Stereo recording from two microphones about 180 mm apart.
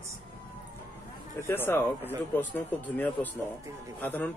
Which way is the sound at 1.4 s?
10° left (ahead or behind).